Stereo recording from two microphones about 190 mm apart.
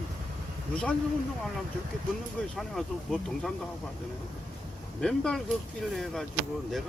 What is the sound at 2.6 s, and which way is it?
Speech, centre (ahead or behind).